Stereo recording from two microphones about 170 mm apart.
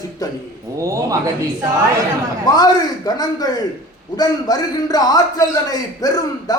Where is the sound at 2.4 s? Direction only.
25° left (ahead or behind).